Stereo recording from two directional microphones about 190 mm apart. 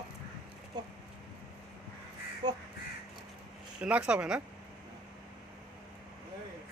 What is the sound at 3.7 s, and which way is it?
Speech, 5° right (ahead or behind).